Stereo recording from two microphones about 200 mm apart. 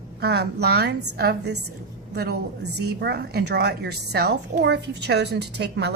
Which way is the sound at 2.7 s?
55° right (ahead or behind).